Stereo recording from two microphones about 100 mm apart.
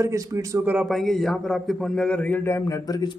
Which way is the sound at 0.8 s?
Centre (ahead or behind).